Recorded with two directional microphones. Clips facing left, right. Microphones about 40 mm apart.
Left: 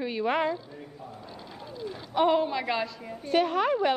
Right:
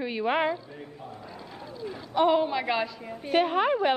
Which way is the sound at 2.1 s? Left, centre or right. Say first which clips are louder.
Right 1 dB; centre.